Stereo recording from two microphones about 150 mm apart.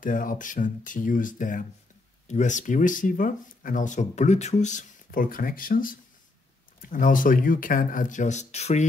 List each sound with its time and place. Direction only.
0.0 s speech: 65° left (ahead or behind); by 8.8 s 45° left (ahead or behind)